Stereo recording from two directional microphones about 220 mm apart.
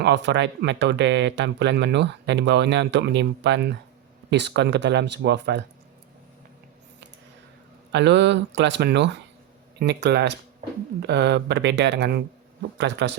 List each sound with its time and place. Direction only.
0.0 s speech: 50° right (ahead or behind)
7.9 s speech: 55° right (ahead or behind)